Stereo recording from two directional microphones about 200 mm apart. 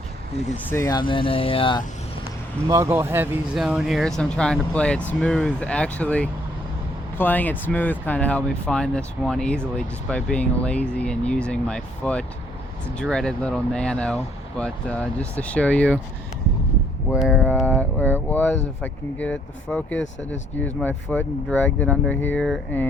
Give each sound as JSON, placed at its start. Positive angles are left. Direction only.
{"t": 0.5, "sound": "speech", "side_deg": 15}
{"t": 2.6, "sound": "speech", "side_deg": -15}
{"t": 17.1, "sound": "speech", "side_deg": 15}